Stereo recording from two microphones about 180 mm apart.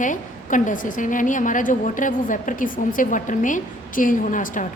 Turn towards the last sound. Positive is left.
turn(degrees=45)  # may be behind; listen again after turning